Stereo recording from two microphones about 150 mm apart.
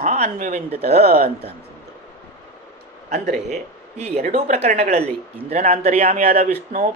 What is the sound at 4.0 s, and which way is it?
Speech, 45° right (ahead or behind).